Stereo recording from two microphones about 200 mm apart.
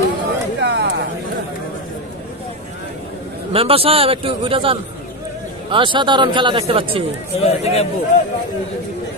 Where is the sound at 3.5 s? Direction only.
30° right (ahead or behind).